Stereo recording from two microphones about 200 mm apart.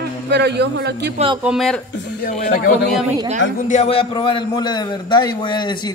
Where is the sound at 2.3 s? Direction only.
45° left (ahead or behind).